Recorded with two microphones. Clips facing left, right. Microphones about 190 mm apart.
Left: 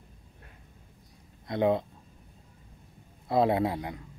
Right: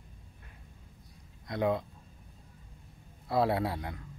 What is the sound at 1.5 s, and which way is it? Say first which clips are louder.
Speech: left 4 dB; 25° left (ahead or behind).